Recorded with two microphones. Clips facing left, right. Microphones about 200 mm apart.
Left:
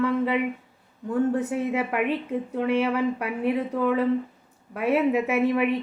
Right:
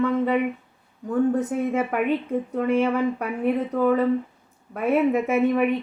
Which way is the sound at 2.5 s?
5° left (ahead or behind).